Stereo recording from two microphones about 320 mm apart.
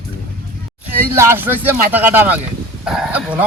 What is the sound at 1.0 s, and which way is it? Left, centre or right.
Speech, centre.